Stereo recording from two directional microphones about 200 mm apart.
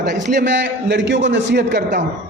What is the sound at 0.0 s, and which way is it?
A man's voice, 55° right (ahead or behind).